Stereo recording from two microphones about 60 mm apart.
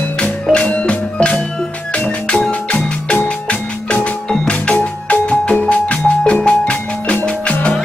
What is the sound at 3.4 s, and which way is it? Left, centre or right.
Music, centre.